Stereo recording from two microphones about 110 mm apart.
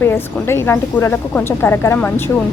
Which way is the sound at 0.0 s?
20° left (ahead or behind).